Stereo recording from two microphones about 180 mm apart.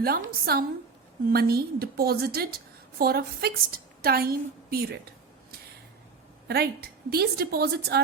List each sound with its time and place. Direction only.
0.0 s a woman's voice: 55° right (ahead or behind)
6.5 s a woman's voice: 60° right (ahead or behind)